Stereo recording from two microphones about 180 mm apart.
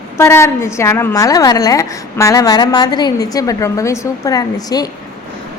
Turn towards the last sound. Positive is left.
turn(degrees=20)  # may be behind; listen again after turning